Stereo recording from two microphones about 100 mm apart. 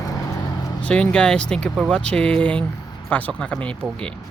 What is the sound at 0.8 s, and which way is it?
Speech, 10° left (ahead or behind).